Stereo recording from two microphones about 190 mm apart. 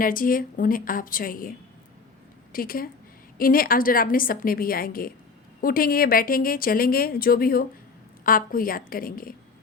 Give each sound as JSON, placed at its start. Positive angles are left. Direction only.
{"t": 0.0, "sound": "a woman's voice", "side_deg": 45}